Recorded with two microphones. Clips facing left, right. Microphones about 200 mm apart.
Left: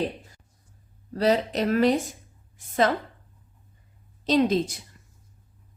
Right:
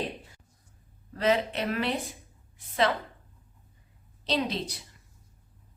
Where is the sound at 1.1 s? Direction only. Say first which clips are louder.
Left 4 dB; 35° left (ahead or behind).